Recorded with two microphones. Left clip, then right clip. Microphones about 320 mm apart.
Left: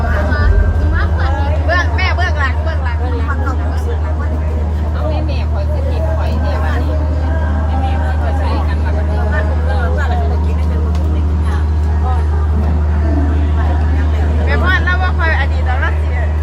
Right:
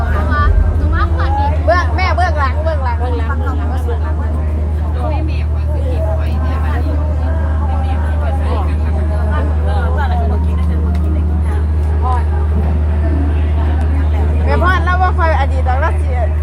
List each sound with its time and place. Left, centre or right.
1.6 s vehicle: centre
14.4 s vehicle: centre